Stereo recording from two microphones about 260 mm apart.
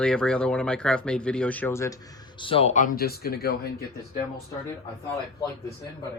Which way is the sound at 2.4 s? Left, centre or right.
Left.